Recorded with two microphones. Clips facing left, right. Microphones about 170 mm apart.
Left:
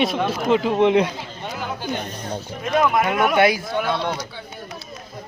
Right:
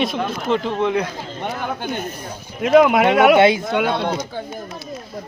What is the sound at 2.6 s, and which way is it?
Speech, 80° right.